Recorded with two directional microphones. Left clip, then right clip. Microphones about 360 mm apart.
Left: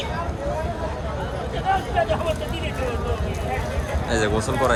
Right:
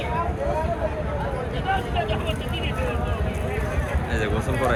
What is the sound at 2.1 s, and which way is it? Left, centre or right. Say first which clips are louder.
Vehicle: left 4 dB; left.